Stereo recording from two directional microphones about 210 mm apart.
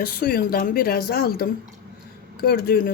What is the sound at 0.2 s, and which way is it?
Speech, 45° left (ahead or behind).